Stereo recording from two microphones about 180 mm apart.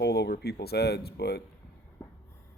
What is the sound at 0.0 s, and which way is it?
Speech, 65° left (ahead or behind).